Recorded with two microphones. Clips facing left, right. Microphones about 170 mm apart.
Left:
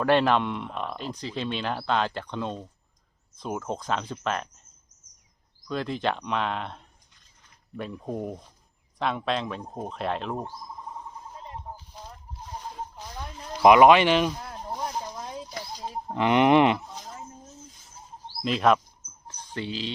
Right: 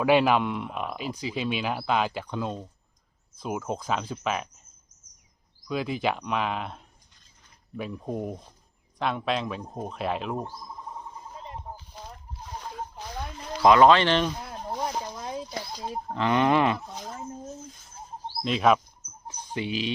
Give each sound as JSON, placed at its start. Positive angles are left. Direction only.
{"t": 0.0, "sound": "speech", "side_deg": -5}
{"t": 5.6, "sound": "speech", "side_deg": -5}
{"t": 13.0, "sound": "a sound", "side_deg": -70}
{"t": 13.6, "sound": "speech", "side_deg": 15}
{"t": 16.0, "sound": "speech", "side_deg": 15}
{"t": 18.4, "sound": "speech", "side_deg": 0}
{"t": 19.3, "sound": "speech", "side_deg": -15}